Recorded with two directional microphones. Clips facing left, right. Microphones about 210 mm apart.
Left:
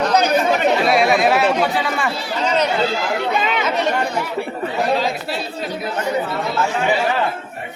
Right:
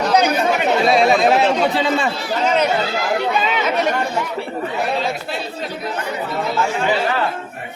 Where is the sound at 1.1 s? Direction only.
25° right (ahead or behind).